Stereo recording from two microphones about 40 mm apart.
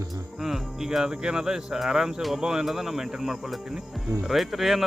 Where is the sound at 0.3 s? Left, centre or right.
Centre.